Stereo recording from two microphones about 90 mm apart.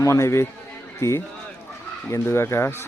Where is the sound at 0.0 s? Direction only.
35° left (ahead or behind).